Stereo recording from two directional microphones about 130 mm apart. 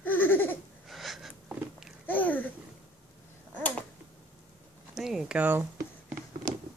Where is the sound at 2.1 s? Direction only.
15° left (ahead or behind).